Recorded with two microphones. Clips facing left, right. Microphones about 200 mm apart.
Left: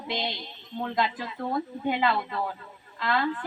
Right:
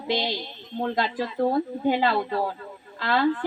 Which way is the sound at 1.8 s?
35° right (ahead or behind).